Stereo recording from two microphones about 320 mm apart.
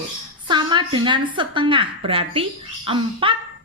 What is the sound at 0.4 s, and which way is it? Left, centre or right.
A woman's voice, centre.